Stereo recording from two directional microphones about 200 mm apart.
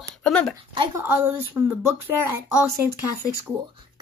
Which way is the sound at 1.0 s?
10° right (ahead or behind).